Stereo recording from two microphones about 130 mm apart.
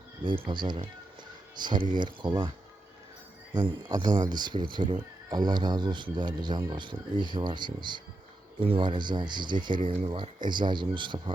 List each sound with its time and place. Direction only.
0.2 s speech: 40° right (ahead or behind)
3.5 s speech: 35° right (ahead or behind)